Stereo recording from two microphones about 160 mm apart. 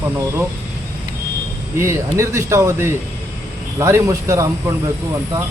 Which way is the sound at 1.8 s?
15° right (ahead or behind).